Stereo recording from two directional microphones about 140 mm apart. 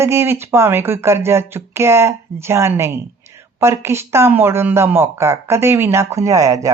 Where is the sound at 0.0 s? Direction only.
20° right (ahead or behind).